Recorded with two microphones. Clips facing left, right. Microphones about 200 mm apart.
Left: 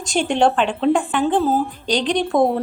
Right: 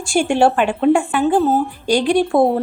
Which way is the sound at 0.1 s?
10° right (ahead or behind).